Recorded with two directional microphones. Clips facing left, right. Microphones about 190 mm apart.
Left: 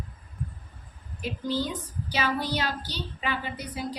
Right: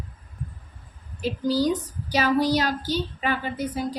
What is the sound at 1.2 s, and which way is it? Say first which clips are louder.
A woman's voice: right 6 dB; 35° right (ahead or behind).